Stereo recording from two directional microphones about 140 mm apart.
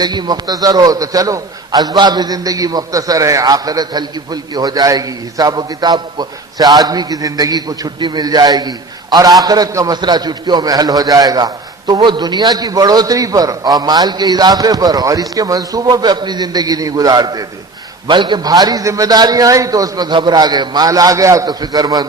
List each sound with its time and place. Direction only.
0.0 s a man's voice: 30° right (ahead or behind)